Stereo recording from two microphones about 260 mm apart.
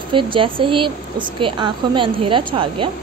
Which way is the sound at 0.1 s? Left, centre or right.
Centre.